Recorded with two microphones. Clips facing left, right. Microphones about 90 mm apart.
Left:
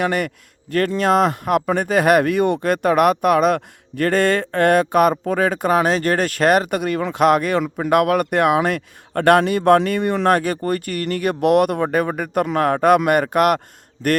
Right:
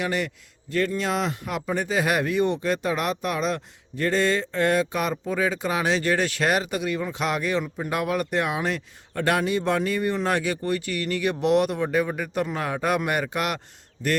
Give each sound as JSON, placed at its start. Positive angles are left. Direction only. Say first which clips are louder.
{"t": 0.0, "sound": "speech", "louder": "left 6 dB", "side_deg": 55}
{"t": 7.6, "sound": "speech", "louder": "left 10 dB", "side_deg": 70}